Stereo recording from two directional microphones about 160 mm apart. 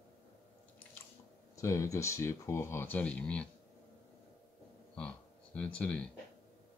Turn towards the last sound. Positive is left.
turn(degrees=10)  # may be behind; listen again after turning